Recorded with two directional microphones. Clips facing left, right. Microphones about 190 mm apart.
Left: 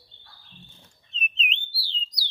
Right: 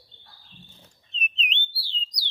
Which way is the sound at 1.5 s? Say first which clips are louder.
Right 1 dB; centre (ahead or behind).